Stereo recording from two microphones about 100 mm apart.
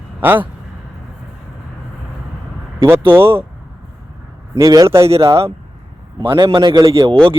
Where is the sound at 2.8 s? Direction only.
25° right (ahead or behind).